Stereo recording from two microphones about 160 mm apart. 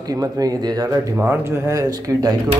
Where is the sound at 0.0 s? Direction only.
20° right (ahead or behind).